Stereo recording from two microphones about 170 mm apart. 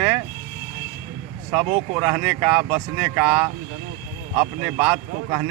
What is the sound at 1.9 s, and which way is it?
Speech, 20° right (ahead or behind).